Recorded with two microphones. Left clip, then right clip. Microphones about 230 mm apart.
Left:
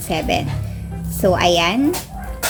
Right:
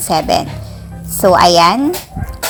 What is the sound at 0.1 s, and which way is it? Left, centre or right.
Speech, right.